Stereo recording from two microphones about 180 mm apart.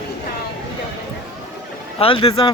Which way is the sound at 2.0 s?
30° left (ahead or behind).